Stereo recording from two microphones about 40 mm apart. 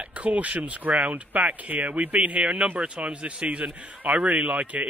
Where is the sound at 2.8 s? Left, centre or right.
Right.